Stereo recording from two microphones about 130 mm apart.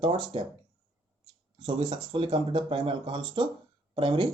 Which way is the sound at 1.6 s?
40° right (ahead or behind).